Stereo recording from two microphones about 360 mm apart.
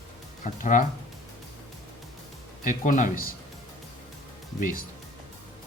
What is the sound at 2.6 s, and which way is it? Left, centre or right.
Speech, left.